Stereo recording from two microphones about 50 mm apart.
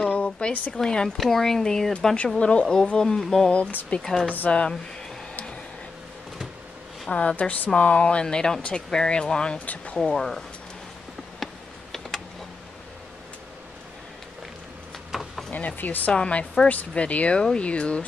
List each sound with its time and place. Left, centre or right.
0.1 s a sound: left
0.7 s speech: centre
2.2 s speech: left
2.6 s speech: centre
4.5 s speech: left
7.1 s speech: left
10.1 s speech: centre
11.3 s computer keyboard: centre
15.0 s a sound: centre
15.5 s speech: left
16.1 s speech: centre